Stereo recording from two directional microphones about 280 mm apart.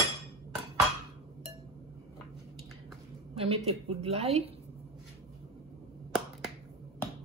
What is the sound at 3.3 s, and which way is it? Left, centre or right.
A woman's voice, right.